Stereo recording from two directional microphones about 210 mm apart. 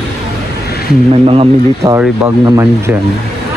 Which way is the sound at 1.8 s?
10° right (ahead or behind).